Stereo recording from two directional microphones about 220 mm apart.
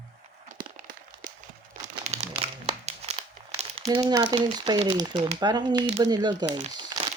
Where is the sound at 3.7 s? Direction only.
20° right (ahead or behind).